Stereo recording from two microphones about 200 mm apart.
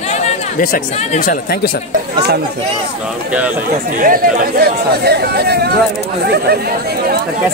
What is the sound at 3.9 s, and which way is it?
Speech, 45° right (ahead or behind).